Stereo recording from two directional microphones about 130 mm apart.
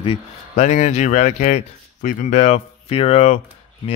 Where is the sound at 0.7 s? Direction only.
65° left (ahead or behind).